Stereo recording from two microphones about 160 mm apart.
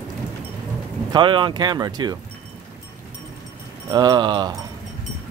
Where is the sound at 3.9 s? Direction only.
25° right (ahead or behind).